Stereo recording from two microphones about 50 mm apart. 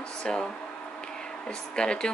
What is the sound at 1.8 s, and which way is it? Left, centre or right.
Speech, centre.